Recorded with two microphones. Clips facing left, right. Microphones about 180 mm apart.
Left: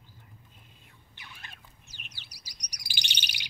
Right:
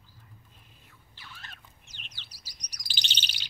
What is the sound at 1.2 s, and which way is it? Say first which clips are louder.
Bird: right 1 dB; 15° left (ahead or behind).